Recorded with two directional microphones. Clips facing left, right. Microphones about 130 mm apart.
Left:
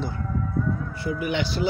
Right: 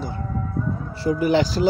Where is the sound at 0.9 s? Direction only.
35° right (ahead or behind).